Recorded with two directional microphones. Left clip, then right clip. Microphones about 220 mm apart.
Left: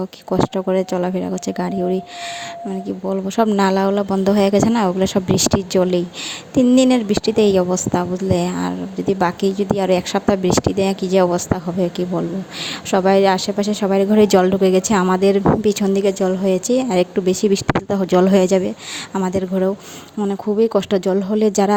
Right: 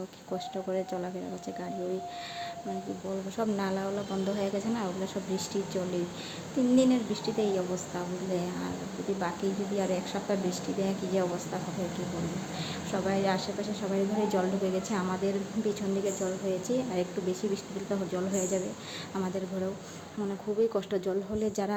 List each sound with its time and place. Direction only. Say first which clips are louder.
0.3 s a woman's voice: left 16 dB; 40° left (ahead or behind)
3.2 s a woman's voice: left 17 dB; 40° left (ahead or behind)
12.9 s a woman's voice: left 16 dB; 45° left (ahead or behind)